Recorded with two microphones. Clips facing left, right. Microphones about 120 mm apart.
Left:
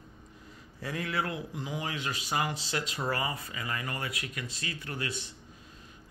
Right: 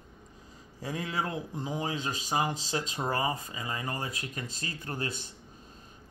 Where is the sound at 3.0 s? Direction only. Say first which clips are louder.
Right 3 dB; 25° right (ahead or behind).